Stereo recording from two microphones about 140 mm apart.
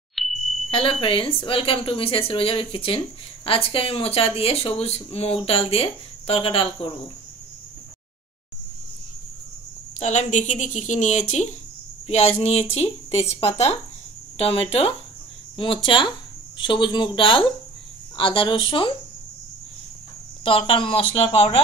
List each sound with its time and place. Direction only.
0.1 s a sound: centre (ahead or behind)
0.7 s speech: 40° left (ahead or behind)
9.9 s speech: 55° left (ahead or behind); by 18.9 s 40° left (ahead or behind)
20.4 s speech: 40° left (ahead or behind)